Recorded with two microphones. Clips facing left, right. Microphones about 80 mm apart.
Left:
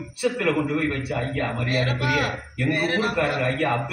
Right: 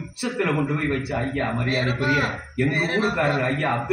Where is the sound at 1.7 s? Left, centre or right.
Right.